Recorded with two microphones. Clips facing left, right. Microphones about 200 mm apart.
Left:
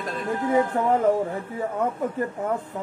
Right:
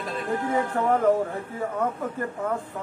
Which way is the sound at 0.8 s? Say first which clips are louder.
Left 1 dB; 20° left (ahead or behind).